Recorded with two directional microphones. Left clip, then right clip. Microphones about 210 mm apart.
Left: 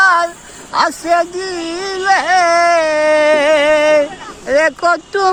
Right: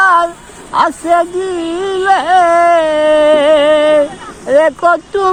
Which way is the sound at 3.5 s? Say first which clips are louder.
Right 2 dB; 30° left (ahead or behind).